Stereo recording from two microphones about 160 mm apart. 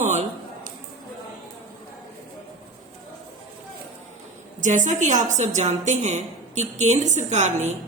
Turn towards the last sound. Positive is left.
turn(degrees=-45)  # may be behind; listen again after turning